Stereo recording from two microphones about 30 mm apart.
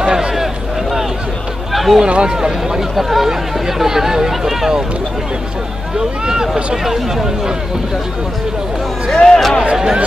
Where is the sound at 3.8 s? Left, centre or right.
Centre.